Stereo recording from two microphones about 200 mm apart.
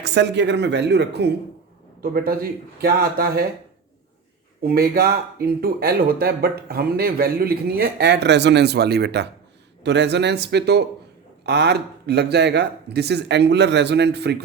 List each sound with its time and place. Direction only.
0.0 s speech: 60° right (ahead or behind)
4.6 s speech: 50° right (ahead or behind)